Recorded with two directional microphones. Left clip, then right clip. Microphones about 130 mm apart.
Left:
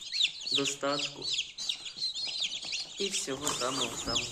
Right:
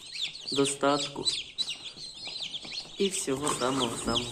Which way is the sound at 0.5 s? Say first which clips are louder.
Right 6 dB; 35° right (ahead or behind).